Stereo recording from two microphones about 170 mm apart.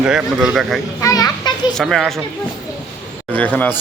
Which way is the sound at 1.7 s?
Centre (ahead or behind).